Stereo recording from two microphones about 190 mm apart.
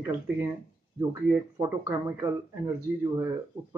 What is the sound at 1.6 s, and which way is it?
Speech, 15° right (ahead or behind).